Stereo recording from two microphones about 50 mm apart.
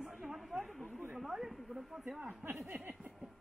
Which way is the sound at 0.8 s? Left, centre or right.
Right.